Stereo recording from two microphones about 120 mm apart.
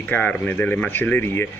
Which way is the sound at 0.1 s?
15° left (ahead or behind).